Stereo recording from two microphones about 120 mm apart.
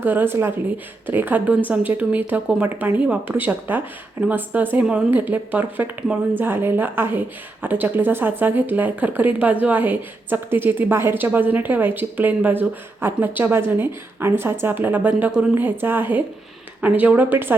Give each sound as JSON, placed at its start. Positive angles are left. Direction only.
{"t": 0.0, "sound": "speech", "side_deg": -15}